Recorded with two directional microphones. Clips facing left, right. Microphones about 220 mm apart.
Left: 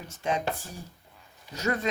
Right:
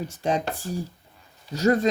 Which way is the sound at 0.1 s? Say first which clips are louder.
Even; 35° right (ahead or behind).